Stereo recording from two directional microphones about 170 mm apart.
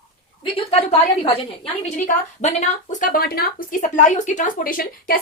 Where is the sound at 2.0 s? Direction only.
45° left (ahead or behind).